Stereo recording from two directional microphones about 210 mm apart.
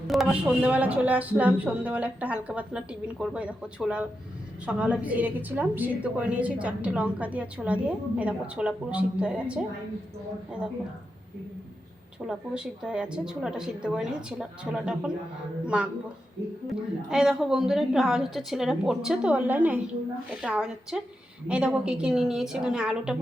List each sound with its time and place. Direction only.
0.1 s a woman's voice: 5° right (ahead or behind)
12.2 s a woman's voice: 5° right (ahead or behind)
17.1 s a woman's voice: 5° right (ahead or behind)